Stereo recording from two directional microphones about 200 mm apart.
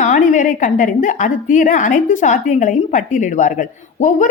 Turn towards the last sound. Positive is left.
turn(degrees=40)  # may be behind; listen again after turning